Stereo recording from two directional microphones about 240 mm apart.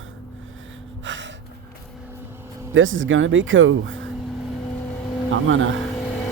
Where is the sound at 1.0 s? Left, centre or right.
Right.